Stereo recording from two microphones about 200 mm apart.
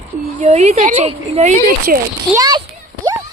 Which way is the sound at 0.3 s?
35° right (ahead or behind).